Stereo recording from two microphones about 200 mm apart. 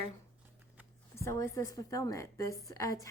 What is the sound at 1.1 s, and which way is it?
A woman's voice, 15° left (ahead or behind).